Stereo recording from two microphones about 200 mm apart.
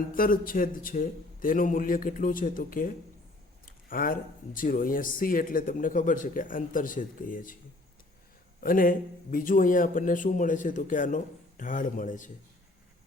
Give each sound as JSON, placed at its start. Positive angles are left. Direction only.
{"t": 0.1, "sound": "speech", "side_deg": 45}
{"t": 8.6, "sound": "a man's voice", "side_deg": 45}